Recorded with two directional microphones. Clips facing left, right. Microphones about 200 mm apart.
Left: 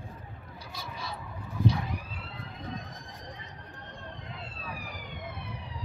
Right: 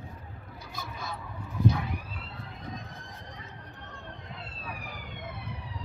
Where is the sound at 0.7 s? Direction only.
50° right (ahead or behind).